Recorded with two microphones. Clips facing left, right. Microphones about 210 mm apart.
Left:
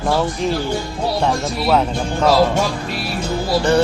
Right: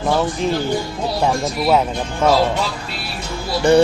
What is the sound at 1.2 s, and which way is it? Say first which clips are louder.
Speech: right 3 dB; 10° right (ahead or behind).